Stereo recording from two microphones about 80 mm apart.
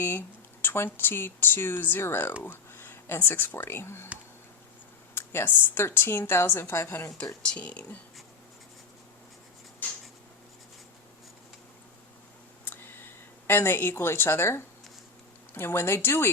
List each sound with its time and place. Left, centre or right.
0.0 s speech: left
5.1 s speech: left
7.4 s speech: centre
12.6 s a sound: left
13.5 s speech: left